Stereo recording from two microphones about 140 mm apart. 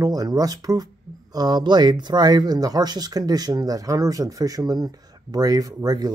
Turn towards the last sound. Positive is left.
turn(degrees=-30)  # may be behind; listen again after turning